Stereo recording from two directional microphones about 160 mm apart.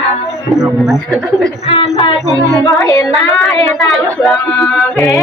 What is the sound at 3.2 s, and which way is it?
Speech, centre (ahead or behind).